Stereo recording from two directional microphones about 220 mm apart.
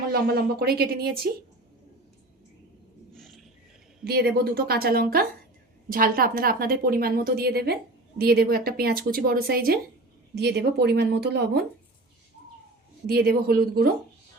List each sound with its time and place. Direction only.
0.1 s speech: 45° right (ahead or behind)
3.2 s bird: centre (ahead or behind)
4.0 s a woman's voice: 45° right (ahead or behind)
13.1 s speech: 45° right (ahead or behind)